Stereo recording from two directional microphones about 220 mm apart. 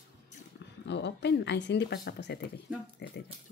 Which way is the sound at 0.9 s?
50° left (ahead or behind).